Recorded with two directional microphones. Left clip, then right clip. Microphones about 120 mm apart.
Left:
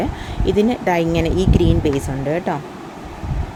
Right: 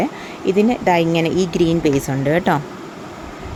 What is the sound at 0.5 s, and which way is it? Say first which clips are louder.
Speech: right 2 dB; 15° right (ahead or behind).